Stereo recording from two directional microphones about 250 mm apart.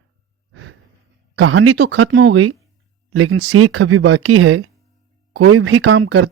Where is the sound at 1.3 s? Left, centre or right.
Right.